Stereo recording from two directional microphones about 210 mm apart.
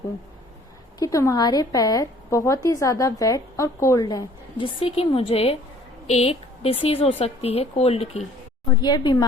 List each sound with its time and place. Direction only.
0.9 s a woman's voice: 15° left (ahead or behind)